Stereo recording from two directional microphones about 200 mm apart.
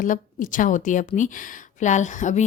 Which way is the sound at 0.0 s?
40° left (ahead or behind).